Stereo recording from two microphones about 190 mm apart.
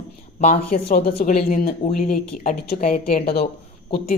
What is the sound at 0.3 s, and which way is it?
Speech, 45° left (ahead or behind).